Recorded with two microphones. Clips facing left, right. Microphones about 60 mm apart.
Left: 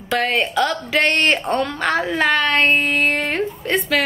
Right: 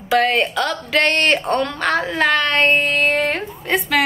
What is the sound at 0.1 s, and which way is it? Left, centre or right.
Speech, centre.